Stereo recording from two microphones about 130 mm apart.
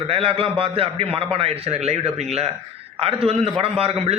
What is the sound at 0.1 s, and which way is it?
A man's voice, 45° right (ahead or behind).